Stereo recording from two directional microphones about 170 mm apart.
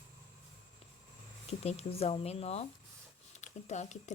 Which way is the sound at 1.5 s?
35° left (ahead or behind).